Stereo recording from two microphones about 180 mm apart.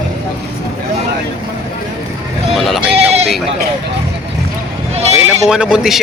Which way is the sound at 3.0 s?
35° right (ahead or behind).